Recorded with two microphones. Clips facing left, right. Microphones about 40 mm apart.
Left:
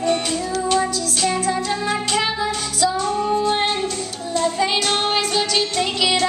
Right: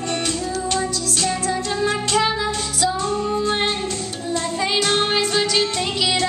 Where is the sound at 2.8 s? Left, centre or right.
Right.